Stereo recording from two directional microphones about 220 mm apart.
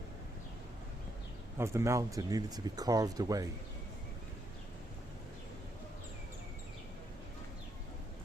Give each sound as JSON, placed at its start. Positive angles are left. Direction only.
{"t": 1.5, "sound": "speech", "side_deg": -10}